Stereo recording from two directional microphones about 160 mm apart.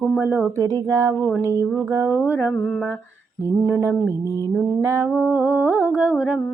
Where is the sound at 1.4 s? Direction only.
15° right (ahead or behind).